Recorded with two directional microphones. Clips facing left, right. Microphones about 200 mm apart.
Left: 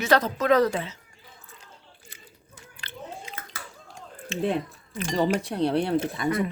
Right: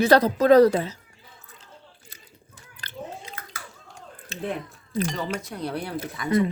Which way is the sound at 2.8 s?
40° right (ahead or behind).